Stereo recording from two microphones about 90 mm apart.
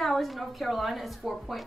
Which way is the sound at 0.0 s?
Centre (ahead or behind).